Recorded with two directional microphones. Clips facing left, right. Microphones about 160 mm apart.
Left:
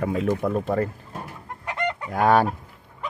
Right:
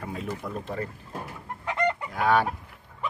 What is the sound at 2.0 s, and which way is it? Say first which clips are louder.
Fowl: left 7 dB; 45° left (ahead or behind).